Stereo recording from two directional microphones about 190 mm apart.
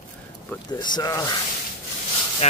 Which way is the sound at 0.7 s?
20° left (ahead or behind).